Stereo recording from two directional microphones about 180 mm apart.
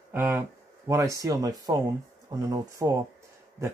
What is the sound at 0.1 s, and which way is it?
Speech, 10° right (ahead or behind).